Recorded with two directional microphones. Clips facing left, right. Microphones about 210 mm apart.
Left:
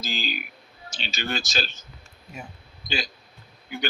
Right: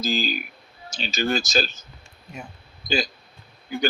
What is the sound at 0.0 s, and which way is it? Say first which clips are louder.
Speech: right 7 dB; 40° right (ahead or behind).